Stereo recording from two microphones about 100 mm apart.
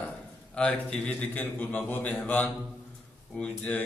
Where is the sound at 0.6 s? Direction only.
10° left (ahead or behind).